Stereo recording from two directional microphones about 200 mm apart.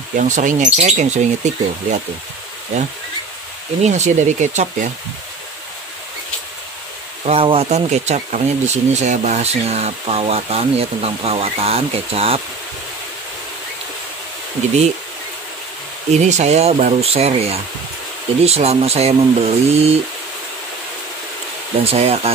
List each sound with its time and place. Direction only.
0.1 s speech: 40° right (ahead or behind)
3.8 s speech: 35° right (ahead or behind)
7.2 s speech: 30° right (ahead or behind)
16.1 s speech: 35° right (ahead or behind)
21.8 s speech: 30° right (ahead or behind)